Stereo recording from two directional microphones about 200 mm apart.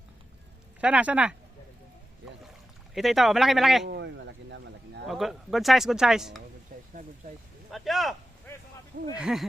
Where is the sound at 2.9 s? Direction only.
Centre (ahead or behind).